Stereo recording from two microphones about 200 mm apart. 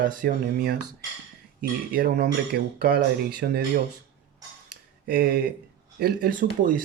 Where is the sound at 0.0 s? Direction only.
45° right (ahead or behind).